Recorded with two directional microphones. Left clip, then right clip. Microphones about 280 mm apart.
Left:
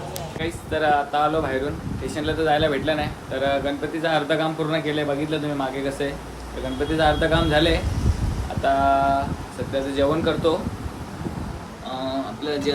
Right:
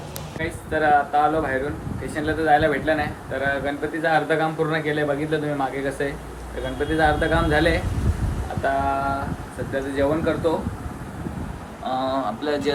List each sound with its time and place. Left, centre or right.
0.7 s speech: centre
9.9 s speech: centre
11.9 s speech: centre